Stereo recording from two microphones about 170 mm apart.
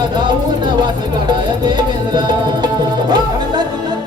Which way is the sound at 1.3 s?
25° right (ahead or behind).